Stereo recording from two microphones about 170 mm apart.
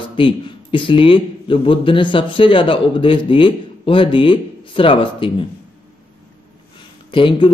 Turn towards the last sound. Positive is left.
turn(degrees=30)  # may be behind; listen again after turning